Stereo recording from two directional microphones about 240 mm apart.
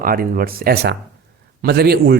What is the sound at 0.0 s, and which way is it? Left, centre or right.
Speech, right.